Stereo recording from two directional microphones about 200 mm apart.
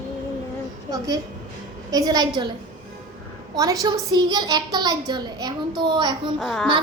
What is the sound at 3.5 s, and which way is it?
A child's voice, 15° right (ahead or behind).